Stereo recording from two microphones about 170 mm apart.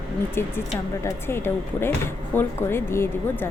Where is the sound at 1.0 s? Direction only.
15° left (ahead or behind).